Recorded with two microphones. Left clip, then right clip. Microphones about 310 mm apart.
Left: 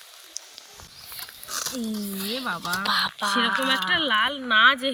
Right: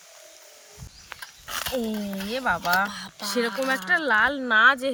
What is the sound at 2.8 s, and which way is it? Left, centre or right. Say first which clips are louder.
Speech: left 9 dB; centre.